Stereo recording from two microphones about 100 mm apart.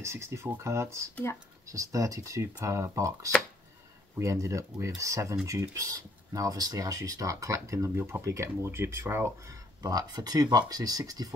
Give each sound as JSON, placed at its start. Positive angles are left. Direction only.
{"t": 0.0, "sound": "speech", "side_deg": -25}
{"t": 9.8, "sound": "speech", "side_deg": -40}